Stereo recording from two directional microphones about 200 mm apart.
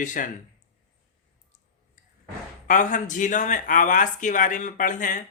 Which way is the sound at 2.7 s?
40° left (ahead or behind).